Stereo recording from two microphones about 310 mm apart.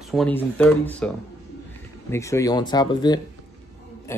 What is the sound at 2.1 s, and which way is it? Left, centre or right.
A man's voice, centre.